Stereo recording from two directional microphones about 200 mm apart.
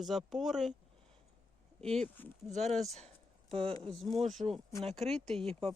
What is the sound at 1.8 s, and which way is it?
Speech, 5° left (ahead or behind).